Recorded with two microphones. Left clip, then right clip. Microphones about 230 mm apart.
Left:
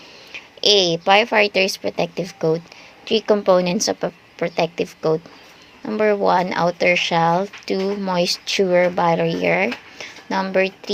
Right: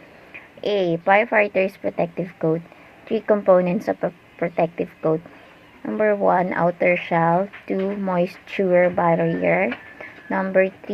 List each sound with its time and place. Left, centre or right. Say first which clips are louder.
0.6 s speech: left 5 dB; left